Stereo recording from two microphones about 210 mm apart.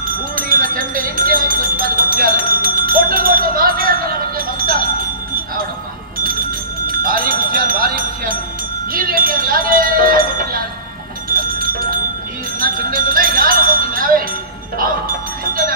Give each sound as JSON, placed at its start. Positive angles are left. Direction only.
{"t": 0.0, "sound": "a sound", "side_deg": -40}
{"t": 6.1, "sound": "bell", "side_deg": -40}
{"t": 8.9, "sound": "speech", "side_deg": -40}
{"t": 11.3, "sound": "bell", "side_deg": -40}
{"t": 12.5, "sound": "music", "side_deg": -40}